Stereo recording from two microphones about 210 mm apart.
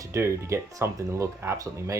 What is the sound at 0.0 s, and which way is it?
Speech, 15° right (ahead or behind).